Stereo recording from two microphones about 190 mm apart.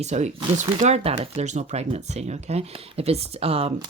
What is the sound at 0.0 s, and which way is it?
Speech, 35° right (ahead or behind).